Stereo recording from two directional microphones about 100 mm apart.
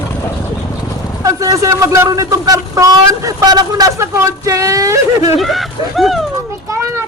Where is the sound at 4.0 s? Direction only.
30° right (ahead or behind).